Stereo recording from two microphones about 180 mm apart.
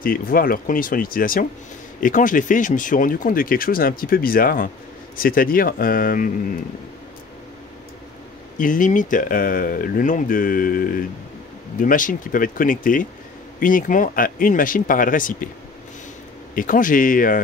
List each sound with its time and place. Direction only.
0.0 s speech: 50° left (ahead or behind)
8.5 s speech: 45° left (ahead or behind)
16.5 s speech: 50° left (ahead or behind)